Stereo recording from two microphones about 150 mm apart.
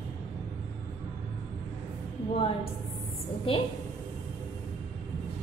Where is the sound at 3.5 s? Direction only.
40° left (ahead or behind).